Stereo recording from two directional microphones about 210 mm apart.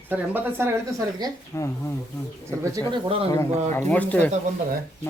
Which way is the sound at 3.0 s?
25° right (ahead or behind).